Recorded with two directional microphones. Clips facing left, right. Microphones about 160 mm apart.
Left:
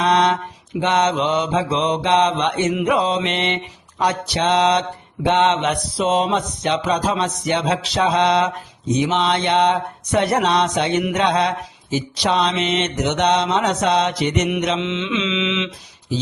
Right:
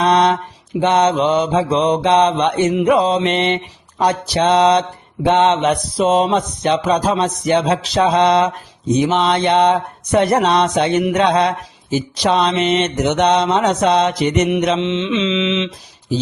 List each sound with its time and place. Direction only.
0.0 s mantra: 40° right (ahead or behind)